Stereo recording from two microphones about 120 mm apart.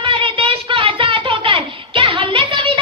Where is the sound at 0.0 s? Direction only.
45° right (ahead or behind).